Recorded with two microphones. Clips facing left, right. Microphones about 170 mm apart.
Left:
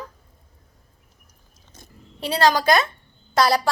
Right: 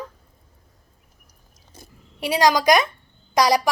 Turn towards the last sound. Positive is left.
turn(degrees=-15)  # may be behind; listen again after turning